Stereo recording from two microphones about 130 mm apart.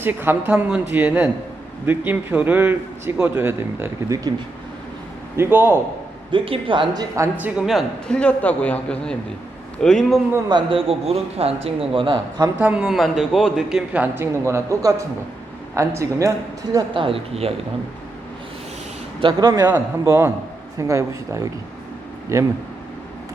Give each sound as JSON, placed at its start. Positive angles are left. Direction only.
{"t": 0.0, "sound": "a man's voice", "side_deg": -15}
{"t": 5.4, "sound": "a man's voice", "side_deg": -15}
{"t": 6.3, "sound": "speech", "side_deg": -40}
{"t": 7.3, "sound": "a man's voice", "side_deg": -10}
{"t": 10.5, "sound": "a man's voice", "side_deg": -45}
{"t": 12.5, "sound": "a man's voice", "side_deg": -10}
{"t": 14.4, "sound": "speech", "side_deg": -25}
{"t": 16.9, "sound": "a man's voice", "side_deg": -45}
{"t": 19.2, "sound": "speech", "side_deg": -30}
{"t": 19.7, "sound": "speech", "side_deg": -20}